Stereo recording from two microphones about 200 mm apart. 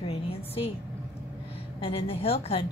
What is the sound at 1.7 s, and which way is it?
Speech, 25° left (ahead or behind).